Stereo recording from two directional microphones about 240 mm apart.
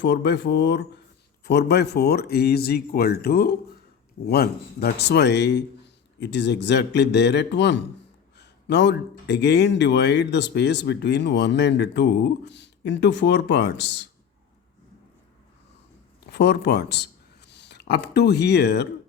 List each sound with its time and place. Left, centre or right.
0.0 s speech: left
16.3 s speech: left